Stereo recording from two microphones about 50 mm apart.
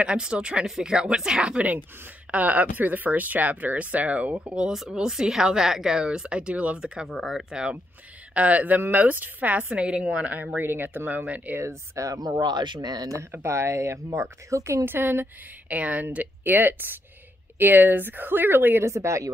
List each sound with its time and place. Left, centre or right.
0.0 s speech: centre
2.3 s speech: right
4.6 s speech: centre; by 6.8 s right
7.1 s speech: centre
8.4 s speech: right
10.6 s speech: right
11.2 s speech: right
11.6 s speech: right
13.4 s speech: right
14.9 s speech: right
15.7 s speech: right
18.9 s speech: right